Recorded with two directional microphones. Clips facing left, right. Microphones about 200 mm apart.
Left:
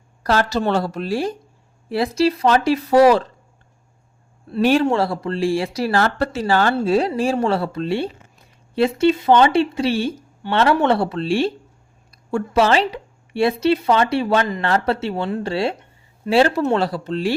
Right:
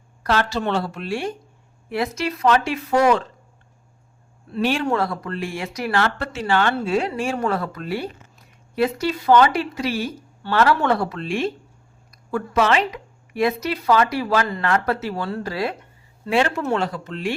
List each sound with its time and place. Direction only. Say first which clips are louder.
0.2 s speech: left 3 dB; 40° left (ahead or behind)
4.5 s speech: left 5 dB; 40° left (ahead or behind)